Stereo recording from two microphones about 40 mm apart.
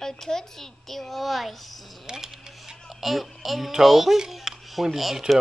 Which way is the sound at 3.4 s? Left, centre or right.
Centre.